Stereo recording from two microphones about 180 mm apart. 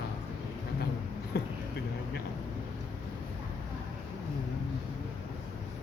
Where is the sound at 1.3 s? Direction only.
65° left (ahead or behind).